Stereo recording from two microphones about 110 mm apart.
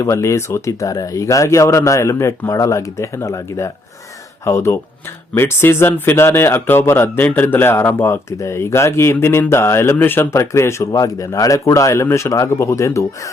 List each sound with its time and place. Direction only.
0.0 s speech: 25° left (ahead or behind)